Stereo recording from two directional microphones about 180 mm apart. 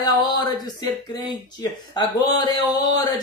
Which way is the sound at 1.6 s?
20° left (ahead or behind).